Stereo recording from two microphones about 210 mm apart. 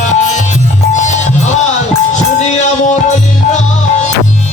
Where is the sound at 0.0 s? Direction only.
35° left (ahead or behind).